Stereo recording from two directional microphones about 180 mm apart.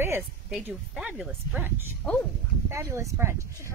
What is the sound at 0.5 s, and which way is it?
A woman's voice, 5° right (ahead or behind).